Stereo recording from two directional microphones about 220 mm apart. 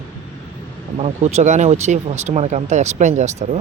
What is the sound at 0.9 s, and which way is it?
Speech, 30° right (ahead or behind).